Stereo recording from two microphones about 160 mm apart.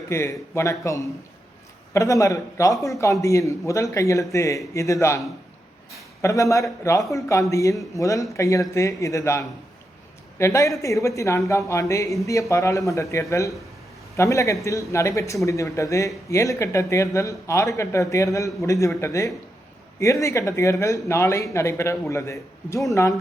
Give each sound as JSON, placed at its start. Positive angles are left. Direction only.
{"t": 0.1, "sound": "a man's voice", "side_deg": 15}
{"t": 6.2, "sound": "a man's voice", "side_deg": 20}